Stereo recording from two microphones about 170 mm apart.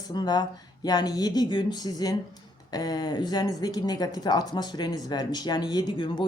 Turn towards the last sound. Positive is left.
turn(degrees=25)  # may be behind; listen again after turning